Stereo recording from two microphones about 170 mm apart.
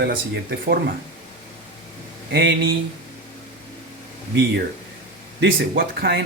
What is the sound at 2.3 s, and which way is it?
Speech, 80° right.